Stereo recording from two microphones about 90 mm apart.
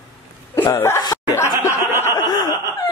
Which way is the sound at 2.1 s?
50° left (ahead or behind).